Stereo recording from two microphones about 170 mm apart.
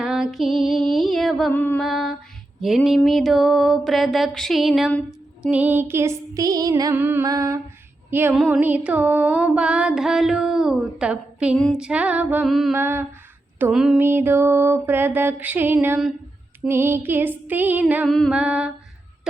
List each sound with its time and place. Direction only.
0.0 s music: centre (ahead or behind)
1.8 s music: centre (ahead or behind)
5.4 s mantra: 10° right (ahead or behind)
7.3 s a sound: 20° right (ahead or behind)
8.1 s mantra: 10° right (ahead or behind)
8.4 s music: 10° right (ahead or behind)
12.7 s mantra: 15° right (ahead or behind)
18.1 s music: centre (ahead or behind)